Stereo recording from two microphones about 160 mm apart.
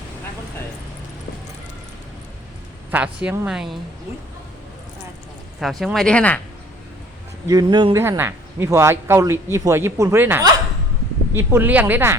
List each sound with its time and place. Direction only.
2.9 s speech: 5° right (ahead or behind)
5.5 s speech: centre (ahead or behind)
7.4 s speech: 25° right (ahead or behind)
7.9 s speech: 15° right (ahead or behind)